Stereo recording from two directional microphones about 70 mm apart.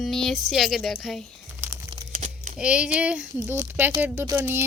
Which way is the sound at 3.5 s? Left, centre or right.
Right.